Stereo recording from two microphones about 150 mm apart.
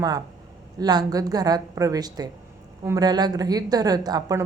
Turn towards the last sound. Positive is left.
turn(degrees=-25)  # may be behind; listen again after turning